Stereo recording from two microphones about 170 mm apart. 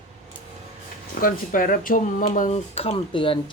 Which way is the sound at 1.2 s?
55° left (ahead or behind).